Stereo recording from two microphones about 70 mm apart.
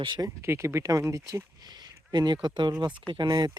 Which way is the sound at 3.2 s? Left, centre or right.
Right.